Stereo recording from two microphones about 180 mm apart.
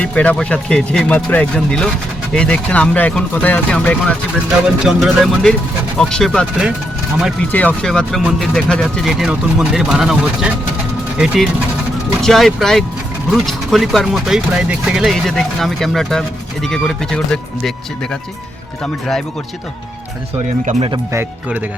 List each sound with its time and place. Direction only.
0.0 s speech: 5° left (ahead or behind)
12.2 s speech: centre (ahead or behind)
20.7 s speech: 40° right (ahead or behind)
20.9 s speech: 15° right (ahead or behind)